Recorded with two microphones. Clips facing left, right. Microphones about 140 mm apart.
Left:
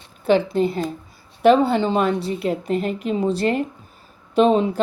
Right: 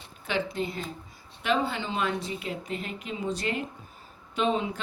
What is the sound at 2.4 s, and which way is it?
Speech, 50° left (ahead or behind).